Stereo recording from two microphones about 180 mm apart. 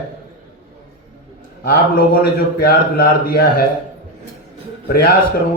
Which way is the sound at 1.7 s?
60° left (ahead or behind).